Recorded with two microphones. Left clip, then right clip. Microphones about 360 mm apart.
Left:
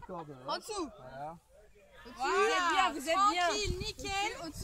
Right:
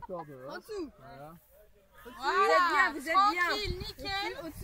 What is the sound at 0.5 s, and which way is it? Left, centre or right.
Speech, centre.